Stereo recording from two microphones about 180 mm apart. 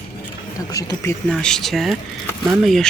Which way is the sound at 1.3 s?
5° left (ahead or behind).